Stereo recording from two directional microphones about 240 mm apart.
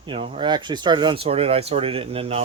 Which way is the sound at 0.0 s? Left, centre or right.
Right.